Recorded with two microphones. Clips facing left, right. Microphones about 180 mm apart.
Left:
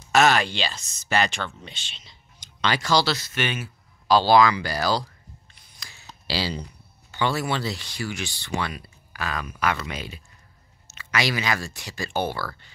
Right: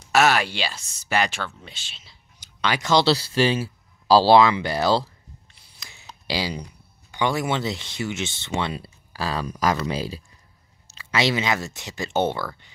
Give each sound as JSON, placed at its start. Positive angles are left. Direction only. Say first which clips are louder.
{"t": 0.1, "sound": "speech", "louder": "even", "side_deg": -10}